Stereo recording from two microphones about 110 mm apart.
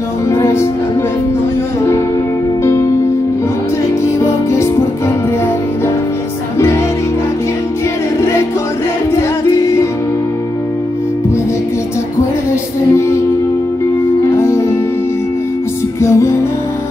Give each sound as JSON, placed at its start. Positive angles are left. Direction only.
{"t": 0.3, "sound": "music", "side_deg": 25}
{"t": 2.6, "sound": "music", "side_deg": 25}
{"t": 4.2, "sound": "music", "side_deg": 25}
{"t": 14.3, "sound": "music", "side_deg": 25}
{"t": 16.0, "sound": "music", "side_deg": 25}